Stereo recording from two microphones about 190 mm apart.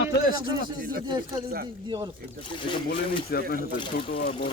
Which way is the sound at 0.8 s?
50° right (ahead or behind).